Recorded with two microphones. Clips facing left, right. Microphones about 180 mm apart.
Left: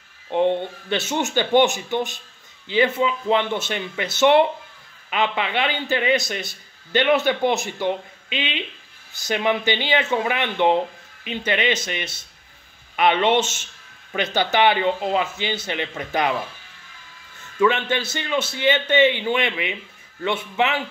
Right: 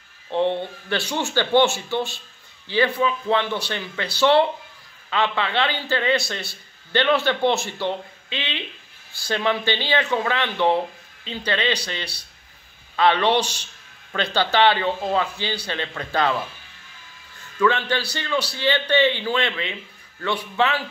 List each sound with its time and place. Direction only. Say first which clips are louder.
0.3 s a man's voice: left 2 dB; 15° left (ahead or behind)
17.6 s a man's voice: left 1 dB; 20° left (ahead or behind)